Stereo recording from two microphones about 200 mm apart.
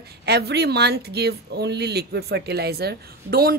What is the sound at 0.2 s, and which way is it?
A woman's voice, 55° right (ahead or behind).